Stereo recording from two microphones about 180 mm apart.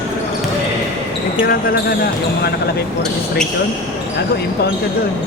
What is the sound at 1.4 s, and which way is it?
Speech, 55° left (ahead or behind).